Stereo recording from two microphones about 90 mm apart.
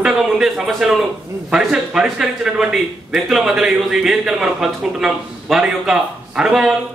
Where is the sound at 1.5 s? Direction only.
5° right (ahead or behind).